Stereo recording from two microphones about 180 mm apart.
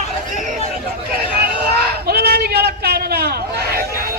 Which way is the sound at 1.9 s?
60° right (ahead or behind).